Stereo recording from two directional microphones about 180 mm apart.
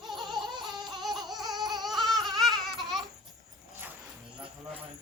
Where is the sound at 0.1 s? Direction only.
25° right (ahead or behind).